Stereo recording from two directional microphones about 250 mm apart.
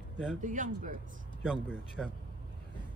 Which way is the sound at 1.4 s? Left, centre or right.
Centre.